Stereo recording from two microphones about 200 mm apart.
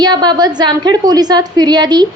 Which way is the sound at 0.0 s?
20° right (ahead or behind).